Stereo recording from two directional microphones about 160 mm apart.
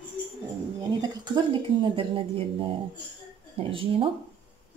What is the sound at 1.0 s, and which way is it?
Speech, 30° right (ahead or behind).